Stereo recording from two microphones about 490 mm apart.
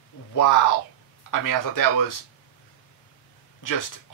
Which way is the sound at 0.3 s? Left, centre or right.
Left.